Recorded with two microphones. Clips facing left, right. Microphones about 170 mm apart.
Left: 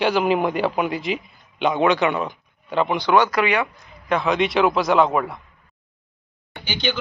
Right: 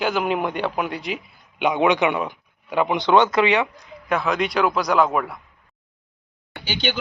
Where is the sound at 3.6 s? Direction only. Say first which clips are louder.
Right 1 dB; 10° right (ahead or behind).